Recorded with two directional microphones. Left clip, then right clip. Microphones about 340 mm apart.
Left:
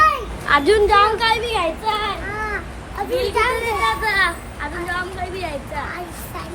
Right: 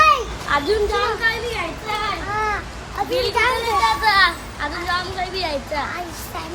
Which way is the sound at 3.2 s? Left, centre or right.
Centre.